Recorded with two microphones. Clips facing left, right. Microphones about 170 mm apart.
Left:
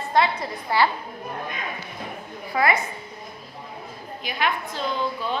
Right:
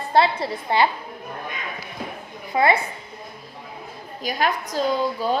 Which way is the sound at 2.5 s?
25° right (ahead or behind).